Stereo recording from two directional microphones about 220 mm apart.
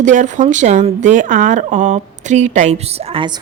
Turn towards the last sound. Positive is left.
turn(degrees=-25)  # may be behind; listen again after turning